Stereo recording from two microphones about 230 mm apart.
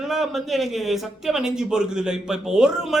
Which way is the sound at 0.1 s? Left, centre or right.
Centre.